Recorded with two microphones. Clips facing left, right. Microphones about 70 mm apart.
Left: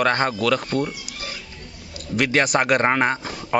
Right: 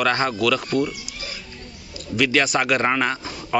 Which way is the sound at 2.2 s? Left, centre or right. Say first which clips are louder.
Even; left.